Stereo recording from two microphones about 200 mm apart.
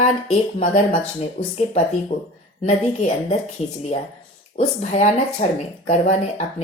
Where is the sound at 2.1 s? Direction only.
45° left (ahead or behind).